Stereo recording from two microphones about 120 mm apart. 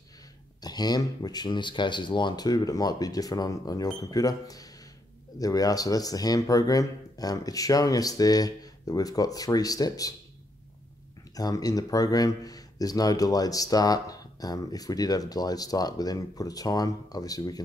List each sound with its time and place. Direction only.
0.6 s speech: 35° left (ahead or behind)
11.3 s speech: 30° left (ahead or behind)